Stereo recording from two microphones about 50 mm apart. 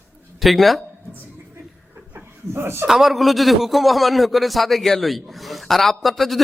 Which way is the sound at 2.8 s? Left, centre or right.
Centre.